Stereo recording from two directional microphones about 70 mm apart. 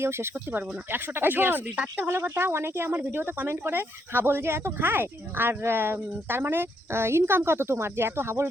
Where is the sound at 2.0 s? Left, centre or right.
Right.